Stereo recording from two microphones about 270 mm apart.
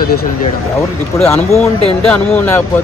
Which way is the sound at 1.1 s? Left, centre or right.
Centre.